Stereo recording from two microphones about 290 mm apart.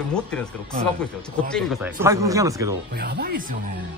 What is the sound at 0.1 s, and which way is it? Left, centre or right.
Speech, centre.